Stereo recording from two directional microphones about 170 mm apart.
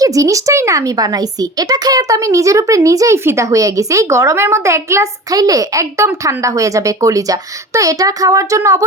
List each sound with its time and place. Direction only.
0.0 s speech: 20° right (ahead or behind)